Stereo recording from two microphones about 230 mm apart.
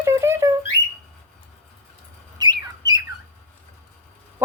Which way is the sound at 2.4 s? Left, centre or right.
Centre.